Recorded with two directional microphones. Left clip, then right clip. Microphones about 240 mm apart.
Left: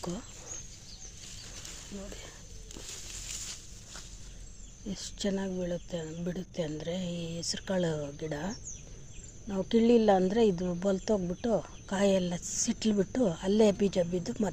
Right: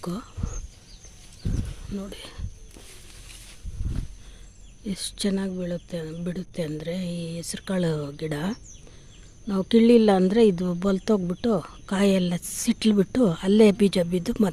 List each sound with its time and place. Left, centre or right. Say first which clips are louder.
2.0 s speech: right 11 dB; right
4.9 s speech: right 6 dB; right